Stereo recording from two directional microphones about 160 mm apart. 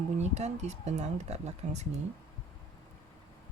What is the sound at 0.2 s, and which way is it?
Speech, 45° right (ahead or behind).